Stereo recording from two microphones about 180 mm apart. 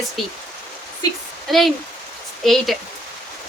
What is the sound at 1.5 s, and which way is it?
Speech, centre (ahead or behind).